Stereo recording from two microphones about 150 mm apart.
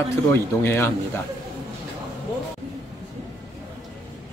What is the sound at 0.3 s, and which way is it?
Speech, 15° left (ahead or behind).